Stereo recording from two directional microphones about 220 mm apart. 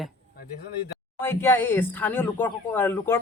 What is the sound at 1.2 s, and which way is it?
Speech, 10° left (ahead or behind).